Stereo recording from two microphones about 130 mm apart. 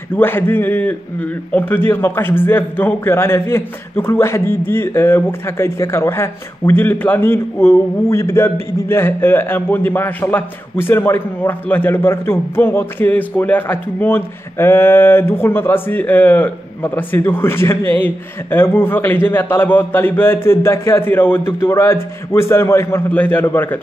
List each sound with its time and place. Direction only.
0.1 s a man's voice: 15° left (ahead or behind)